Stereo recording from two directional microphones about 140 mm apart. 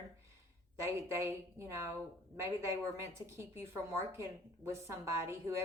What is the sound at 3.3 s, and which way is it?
A woman's voice, 20° right (ahead or behind).